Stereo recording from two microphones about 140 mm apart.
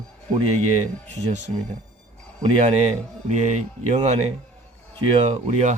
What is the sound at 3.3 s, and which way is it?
Speech, 60° right (ahead or behind).